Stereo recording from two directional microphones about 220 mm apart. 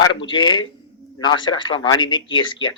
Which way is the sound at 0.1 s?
20° left (ahead or behind).